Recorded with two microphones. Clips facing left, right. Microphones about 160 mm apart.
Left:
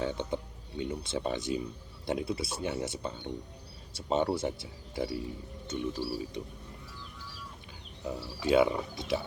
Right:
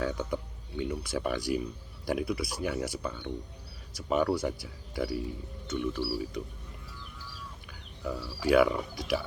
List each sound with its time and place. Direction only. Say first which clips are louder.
0.0 s a sound: right 1 dB; 25° left (ahead or behind)
0.8 s speech: right 1 dB; 25° left (ahead or behind)
7.7 s speech: right 2 dB; 25° left (ahead or behind)